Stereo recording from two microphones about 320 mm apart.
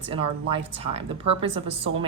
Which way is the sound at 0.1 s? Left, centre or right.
Centre.